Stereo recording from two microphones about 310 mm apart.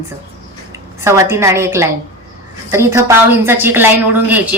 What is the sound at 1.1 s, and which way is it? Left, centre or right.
A woman's voice, centre.